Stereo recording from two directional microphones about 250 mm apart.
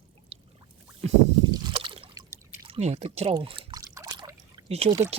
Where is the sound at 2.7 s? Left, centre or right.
Right.